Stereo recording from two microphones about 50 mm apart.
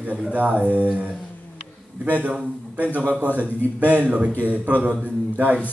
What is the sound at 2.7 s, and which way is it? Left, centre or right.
A man's voice, right.